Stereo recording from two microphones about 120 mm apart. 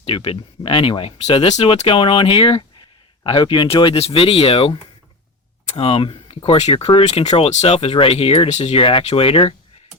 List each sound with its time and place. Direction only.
0.0 s speech: 50° left (ahead or behind)
8.4 s speech: 65° left (ahead or behind); by 9.6 s 50° left (ahead or behind)